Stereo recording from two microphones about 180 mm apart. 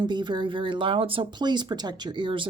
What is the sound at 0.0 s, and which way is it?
Speech, 25° right (ahead or behind).